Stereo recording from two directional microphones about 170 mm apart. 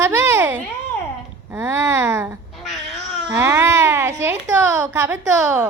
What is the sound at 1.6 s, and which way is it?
Speech, 15° right (ahead or behind).